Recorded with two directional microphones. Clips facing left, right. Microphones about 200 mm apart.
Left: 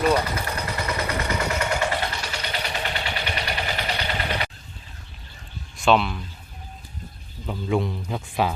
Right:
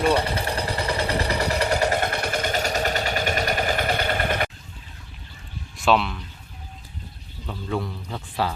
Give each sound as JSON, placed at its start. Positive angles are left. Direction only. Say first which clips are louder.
{"t": 0.0, "sound": "vehicle", "louder": "even", "side_deg": -30}
{"t": 5.7, "sound": "speech", "louder": "left 1 dB", "side_deg": 0}
{"t": 7.4, "sound": "speech", "louder": "left 4 dB", "side_deg": 15}